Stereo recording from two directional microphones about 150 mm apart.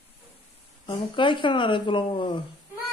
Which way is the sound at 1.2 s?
35° left (ahead or behind).